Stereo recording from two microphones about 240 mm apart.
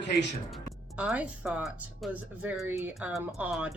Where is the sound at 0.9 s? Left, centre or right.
Centre.